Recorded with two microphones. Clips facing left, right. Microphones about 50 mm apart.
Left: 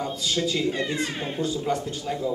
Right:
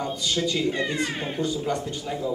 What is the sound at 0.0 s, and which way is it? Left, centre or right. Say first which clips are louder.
A man's voice: even; centre.